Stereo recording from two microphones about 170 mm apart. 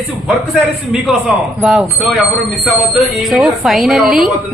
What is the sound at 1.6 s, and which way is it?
A woman's voice, centre (ahead or behind).